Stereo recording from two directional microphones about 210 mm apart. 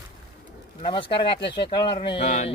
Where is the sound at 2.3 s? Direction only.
35° left (ahead or behind).